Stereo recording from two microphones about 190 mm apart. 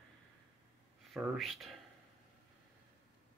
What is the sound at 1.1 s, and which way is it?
Speech, centre (ahead or behind).